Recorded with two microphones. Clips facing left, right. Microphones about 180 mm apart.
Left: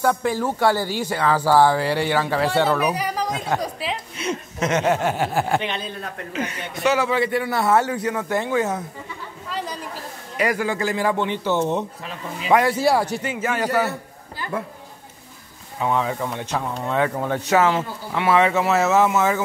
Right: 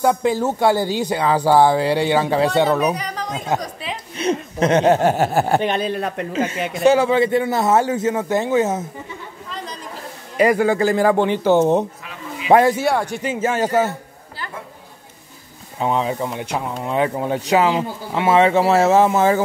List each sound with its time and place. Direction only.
0.0 s speech: 20° right (ahead or behind)
2.9 s speech: 10° left (ahead or behind)
3.3 s a woman's voice: 20° right (ahead or behind)
4.2 s speech: 30° right (ahead or behind)
5.8 s a man's voice: 75° right (ahead or behind)
6.3 s speech: 25° right (ahead or behind)
10.3 s speech: 30° right (ahead or behind)
15.8 s speech: 20° right (ahead or behind)